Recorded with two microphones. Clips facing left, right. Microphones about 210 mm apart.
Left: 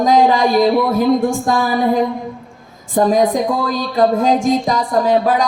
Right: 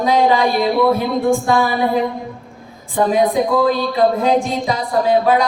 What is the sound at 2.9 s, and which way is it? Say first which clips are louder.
Speech: left 2 dB; 45° left (ahead or behind).